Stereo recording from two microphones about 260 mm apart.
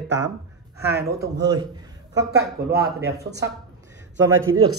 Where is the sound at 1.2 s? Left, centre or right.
Centre.